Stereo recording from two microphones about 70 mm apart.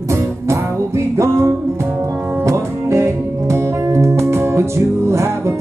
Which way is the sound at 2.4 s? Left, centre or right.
Right.